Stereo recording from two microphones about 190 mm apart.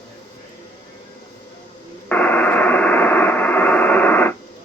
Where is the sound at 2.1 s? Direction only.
10° left (ahead or behind).